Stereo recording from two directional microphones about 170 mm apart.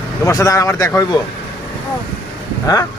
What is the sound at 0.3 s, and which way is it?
Speech, 20° left (ahead or behind).